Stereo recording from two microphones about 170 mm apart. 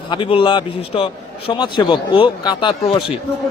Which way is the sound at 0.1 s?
30° left (ahead or behind).